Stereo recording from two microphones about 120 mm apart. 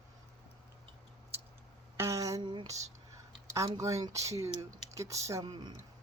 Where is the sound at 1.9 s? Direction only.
25° right (ahead or behind).